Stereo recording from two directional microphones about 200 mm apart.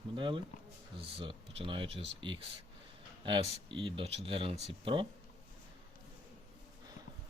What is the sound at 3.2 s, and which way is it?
Speech, 25° right (ahead or behind).